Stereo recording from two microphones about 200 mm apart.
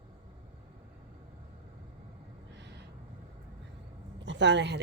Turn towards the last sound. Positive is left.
turn(degrees=-60)  # may be behind; listen again after turning